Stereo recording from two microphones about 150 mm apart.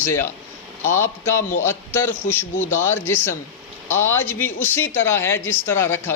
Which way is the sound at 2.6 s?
60° left (ahead or behind).